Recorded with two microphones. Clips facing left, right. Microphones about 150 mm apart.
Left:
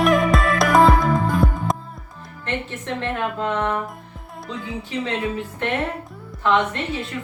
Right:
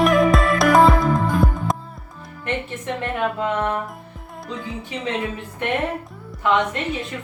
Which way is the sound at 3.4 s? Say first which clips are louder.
Left 1 dB; 10° right (ahead or behind).